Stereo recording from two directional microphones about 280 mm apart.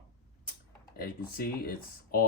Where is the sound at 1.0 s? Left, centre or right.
Left.